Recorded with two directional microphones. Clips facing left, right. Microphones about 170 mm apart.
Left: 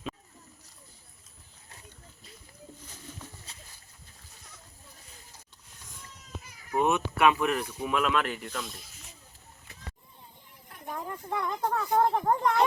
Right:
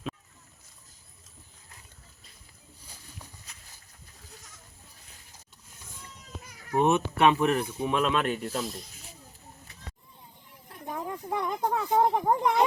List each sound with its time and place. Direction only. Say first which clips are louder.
3.5 s bird: left 3 dB; 30° left (ahead or behind)
6.8 s speech: right 2 dB; 30° right (ahead or behind)
10.9 s a sound: right 2 dB; 10° right (ahead or behind)